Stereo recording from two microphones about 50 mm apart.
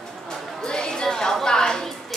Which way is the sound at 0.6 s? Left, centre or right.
Centre.